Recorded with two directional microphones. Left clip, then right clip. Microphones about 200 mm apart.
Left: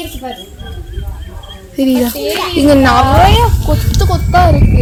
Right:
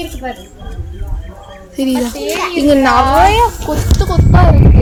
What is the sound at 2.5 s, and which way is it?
A woman's voice, 45° left (ahead or behind).